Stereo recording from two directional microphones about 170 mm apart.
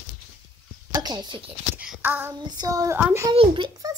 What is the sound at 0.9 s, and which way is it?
Speech, 25° right (ahead or behind).